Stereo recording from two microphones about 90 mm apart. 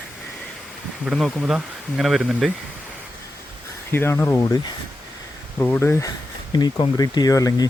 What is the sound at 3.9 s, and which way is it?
Speech, 25° left (ahead or behind).